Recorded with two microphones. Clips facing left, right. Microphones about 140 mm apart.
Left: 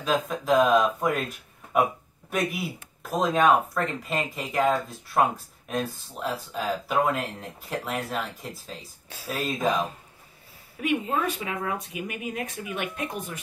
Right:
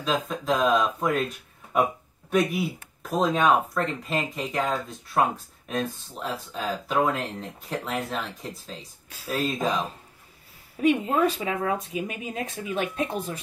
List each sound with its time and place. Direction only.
0.0 s speech: 5° left (ahead or behind)
2.3 s speech: centre (ahead or behind)
10.8 s speech: 30° right (ahead or behind)